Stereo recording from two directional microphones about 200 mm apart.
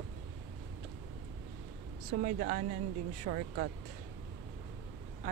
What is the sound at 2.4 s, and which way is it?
Speech, 40° right (ahead or behind).